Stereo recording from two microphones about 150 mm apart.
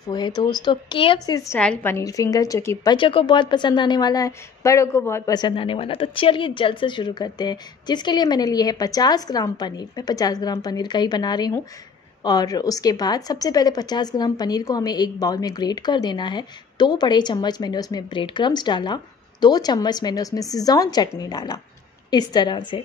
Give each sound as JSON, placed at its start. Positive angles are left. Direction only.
{"t": 0.1, "sound": "a woman's voice", "side_deg": 30}
{"t": 1.6, "sound": "a woman's voice", "side_deg": 10}
{"t": 2.9, "sound": "a woman's voice", "side_deg": 35}